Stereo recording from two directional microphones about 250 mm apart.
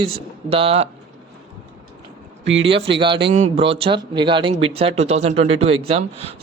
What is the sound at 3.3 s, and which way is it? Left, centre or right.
Speech, right.